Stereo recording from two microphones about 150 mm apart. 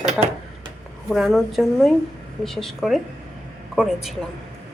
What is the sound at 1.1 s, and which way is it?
A woman's voice, centre (ahead or behind).